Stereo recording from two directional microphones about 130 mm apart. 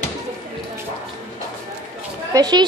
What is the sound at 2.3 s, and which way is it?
Speech, 30° right (ahead or behind).